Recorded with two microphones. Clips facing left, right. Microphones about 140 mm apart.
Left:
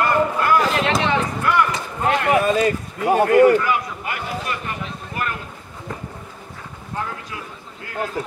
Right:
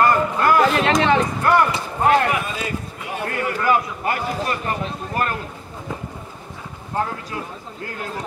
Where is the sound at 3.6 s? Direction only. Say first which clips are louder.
Right 3 dB; 40° right (ahead or behind).